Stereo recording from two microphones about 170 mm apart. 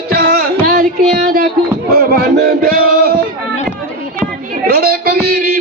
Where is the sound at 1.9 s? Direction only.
60° right (ahead or behind).